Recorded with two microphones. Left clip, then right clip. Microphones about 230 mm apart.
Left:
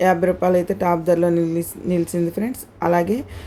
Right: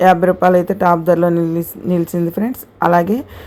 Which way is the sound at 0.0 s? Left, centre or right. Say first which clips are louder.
Right 6 dB; centre.